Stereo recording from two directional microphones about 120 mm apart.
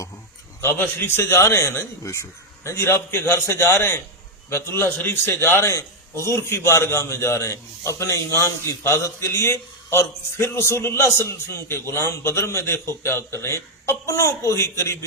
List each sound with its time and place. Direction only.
0.6 s a man's voice: 20° left (ahead or behind)